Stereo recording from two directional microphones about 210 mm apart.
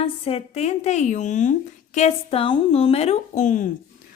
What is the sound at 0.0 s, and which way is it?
A woman's voice, 30° left (ahead or behind).